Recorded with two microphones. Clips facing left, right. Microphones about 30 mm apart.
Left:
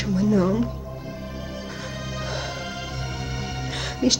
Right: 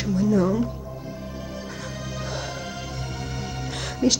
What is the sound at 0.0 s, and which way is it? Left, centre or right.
Speech, centre.